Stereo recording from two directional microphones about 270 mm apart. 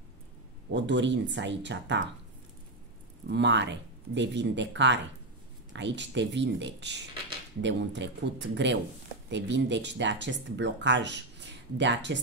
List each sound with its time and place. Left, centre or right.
0.7 s speech: right
3.3 s speech: right